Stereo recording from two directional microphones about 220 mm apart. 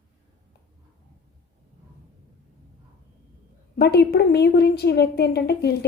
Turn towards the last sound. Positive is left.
turn(degrees=45)  # may be behind; listen again after turning